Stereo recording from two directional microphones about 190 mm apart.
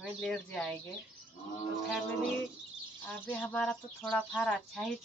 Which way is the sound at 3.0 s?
10° left (ahead or behind).